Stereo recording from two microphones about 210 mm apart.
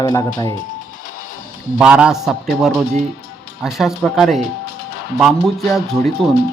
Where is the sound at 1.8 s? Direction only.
5° right (ahead or behind).